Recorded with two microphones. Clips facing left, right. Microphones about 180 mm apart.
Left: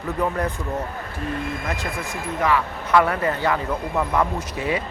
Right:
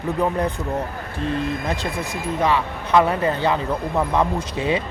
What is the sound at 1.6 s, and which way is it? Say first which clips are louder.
Speech: right 3 dB; 35° right (ahead or behind).